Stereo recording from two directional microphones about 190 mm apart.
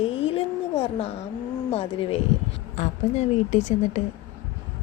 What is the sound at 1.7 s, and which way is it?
A woman's voice, 30° left (ahead or behind).